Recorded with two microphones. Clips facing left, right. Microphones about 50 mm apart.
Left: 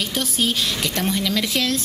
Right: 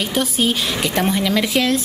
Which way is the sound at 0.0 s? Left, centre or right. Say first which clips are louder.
Right 4 dB; centre.